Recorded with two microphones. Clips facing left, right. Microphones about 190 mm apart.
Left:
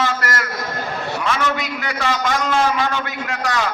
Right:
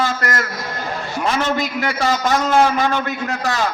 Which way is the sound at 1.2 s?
35° right (ahead or behind).